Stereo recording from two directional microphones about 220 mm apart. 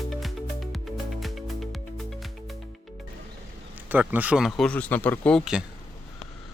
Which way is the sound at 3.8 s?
10° right (ahead or behind).